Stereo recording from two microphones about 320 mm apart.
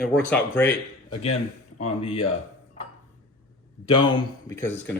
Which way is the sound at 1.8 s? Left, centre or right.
Centre.